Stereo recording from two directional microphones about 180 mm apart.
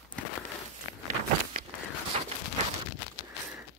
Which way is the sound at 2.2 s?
35° right (ahead or behind).